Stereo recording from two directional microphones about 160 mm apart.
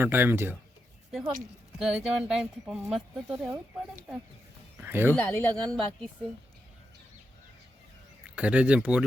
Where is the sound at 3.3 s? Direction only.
15° right (ahead or behind).